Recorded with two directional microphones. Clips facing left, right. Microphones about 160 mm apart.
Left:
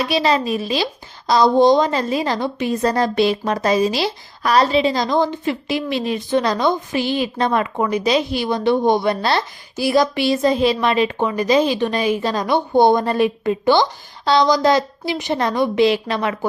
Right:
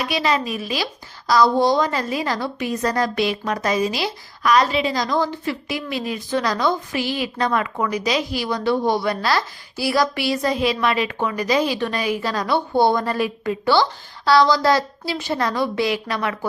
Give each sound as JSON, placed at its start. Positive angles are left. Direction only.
{"t": 0.0, "sound": "a woman's voice", "side_deg": 30}